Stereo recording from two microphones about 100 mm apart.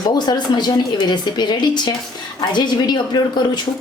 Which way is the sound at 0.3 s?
45° left (ahead or behind).